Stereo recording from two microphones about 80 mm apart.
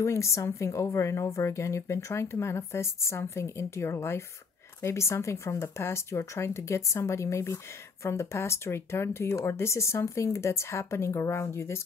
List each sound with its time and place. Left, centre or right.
0.0 s speech: left